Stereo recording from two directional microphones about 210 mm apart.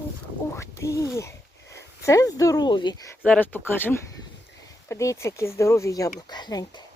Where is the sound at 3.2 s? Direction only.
5° left (ahead or behind).